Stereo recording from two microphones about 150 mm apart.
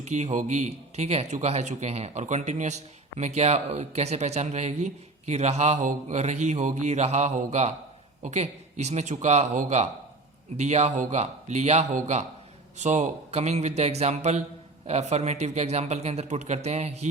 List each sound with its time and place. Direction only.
0.0 s speech: 50° right (ahead or behind)